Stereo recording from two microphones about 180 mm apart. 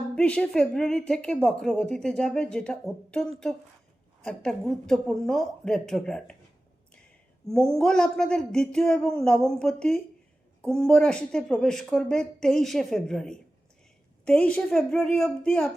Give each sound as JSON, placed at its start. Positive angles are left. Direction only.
{"t": 0.2, "sound": "a woman's voice", "side_deg": 5}
{"t": 4.3, "sound": "a woman's voice", "side_deg": 0}
{"t": 7.4, "sound": "a woman's voice", "side_deg": 5}